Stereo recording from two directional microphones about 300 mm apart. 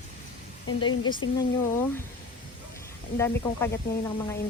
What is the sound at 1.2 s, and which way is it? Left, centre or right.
Speech, centre.